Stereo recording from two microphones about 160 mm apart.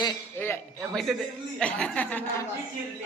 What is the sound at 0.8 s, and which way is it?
A man's voice, centre (ahead or behind).